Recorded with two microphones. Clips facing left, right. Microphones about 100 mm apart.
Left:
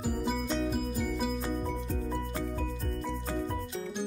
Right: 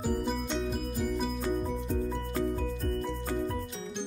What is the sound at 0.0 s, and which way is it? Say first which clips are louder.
Music: right 1 dB; centre (ahead or behind).